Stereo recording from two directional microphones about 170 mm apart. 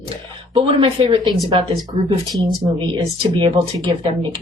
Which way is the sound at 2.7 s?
25° right (ahead or behind).